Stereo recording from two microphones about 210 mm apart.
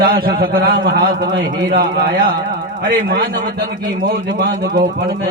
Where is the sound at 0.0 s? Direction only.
45° right (ahead or behind).